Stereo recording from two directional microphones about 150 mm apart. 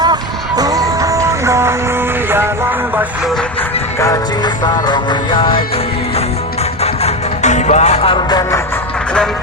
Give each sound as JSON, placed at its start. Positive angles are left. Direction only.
{"t": 0.0, "sound": "music", "side_deg": -25}
{"t": 4.0, "sound": "music", "side_deg": 25}
{"t": 6.8, "sound": "music", "side_deg": 50}